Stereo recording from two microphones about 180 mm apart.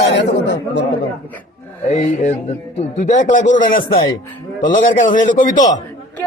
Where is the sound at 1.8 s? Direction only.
40° left (ahead or behind).